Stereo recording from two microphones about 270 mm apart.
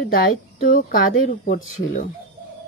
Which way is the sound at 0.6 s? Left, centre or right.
Left.